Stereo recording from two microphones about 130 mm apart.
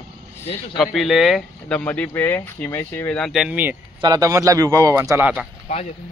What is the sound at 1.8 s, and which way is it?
Speech, 10° left (ahead or behind).